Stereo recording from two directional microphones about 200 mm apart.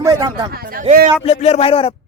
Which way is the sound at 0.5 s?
45° right (ahead or behind).